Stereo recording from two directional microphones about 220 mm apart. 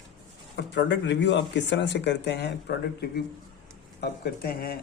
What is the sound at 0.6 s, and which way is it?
Speech, 50° left (ahead or behind).